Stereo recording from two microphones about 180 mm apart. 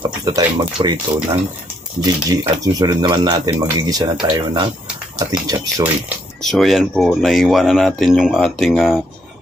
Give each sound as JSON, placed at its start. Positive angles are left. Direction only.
{"t": 0.0, "sound": "speech", "side_deg": -25}
{"t": 6.4, "sound": "speech", "side_deg": 0}